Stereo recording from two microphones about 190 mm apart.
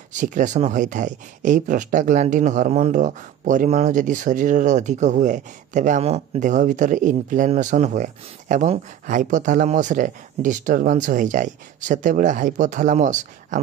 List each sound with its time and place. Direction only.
0.1 s speech: 40° right (ahead or behind)